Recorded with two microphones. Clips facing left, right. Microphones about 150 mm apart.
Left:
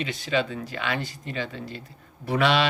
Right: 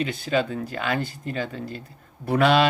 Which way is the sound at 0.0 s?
45° right (ahead or behind).